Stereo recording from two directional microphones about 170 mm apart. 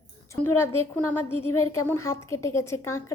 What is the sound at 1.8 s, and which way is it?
A woman's voice, 15° left (ahead or behind).